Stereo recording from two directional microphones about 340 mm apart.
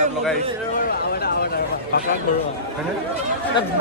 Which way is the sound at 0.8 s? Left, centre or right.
Left.